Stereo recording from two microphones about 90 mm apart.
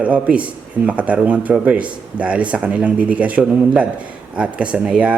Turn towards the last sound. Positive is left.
turn(degrees=-10)  # may be behind; listen again after turning